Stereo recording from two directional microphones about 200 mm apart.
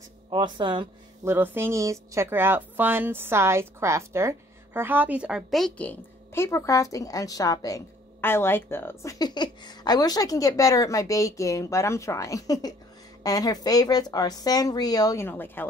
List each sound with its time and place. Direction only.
0.3 s speech: 25° right (ahead or behind)
1.2 s speech: 10° right (ahead or behind); by 15.6 s 10° left (ahead or behind)